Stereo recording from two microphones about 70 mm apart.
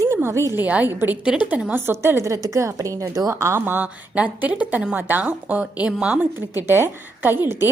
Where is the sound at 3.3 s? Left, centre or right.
Right; by 6.3 s centre.